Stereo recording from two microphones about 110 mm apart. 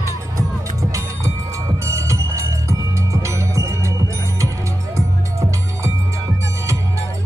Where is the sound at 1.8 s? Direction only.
30° right (ahead or behind).